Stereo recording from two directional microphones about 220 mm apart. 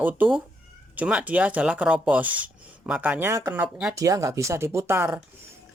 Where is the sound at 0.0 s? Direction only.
10° right (ahead or behind).